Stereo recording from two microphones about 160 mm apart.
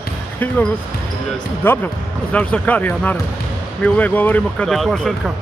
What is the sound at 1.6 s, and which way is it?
Speech, 15° left (ahead or behind).